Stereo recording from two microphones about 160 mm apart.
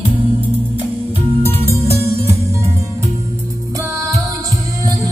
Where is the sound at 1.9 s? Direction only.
15° right (ahead or behind).